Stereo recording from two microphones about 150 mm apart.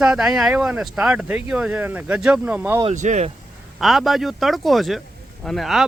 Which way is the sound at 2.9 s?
50° right (ahead or behind).